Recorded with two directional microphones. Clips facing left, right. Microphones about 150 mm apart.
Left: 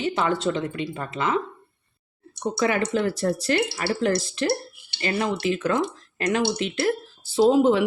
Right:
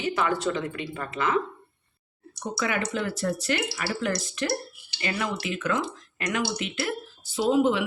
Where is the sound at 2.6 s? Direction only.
35° left (ahead or behind).